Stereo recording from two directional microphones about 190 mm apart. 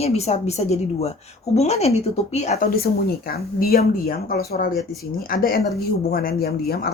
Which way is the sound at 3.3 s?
50° left (ahead or behind).